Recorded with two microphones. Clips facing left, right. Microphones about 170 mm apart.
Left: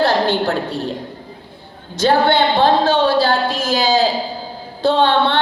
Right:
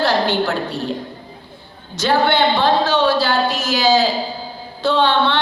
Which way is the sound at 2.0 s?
50° left (ahead or behind).